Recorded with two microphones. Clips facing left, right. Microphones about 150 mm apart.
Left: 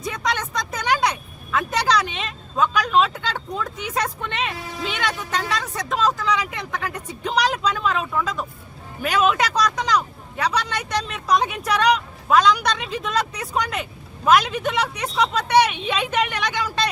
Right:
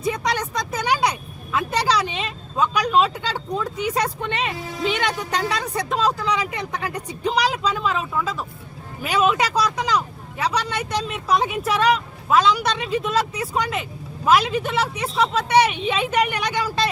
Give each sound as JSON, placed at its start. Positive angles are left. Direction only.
{"t": 0.0, "sound": "vehicle", "side_deg": -10}
{"t": 0.7, "sound": "speech", "side_deg": -10}
{"t": 4.9, "sound": "speech", "side_deg": -35}
{"t": 6.2, "sound": "a woman's voice", "side_deg": -10}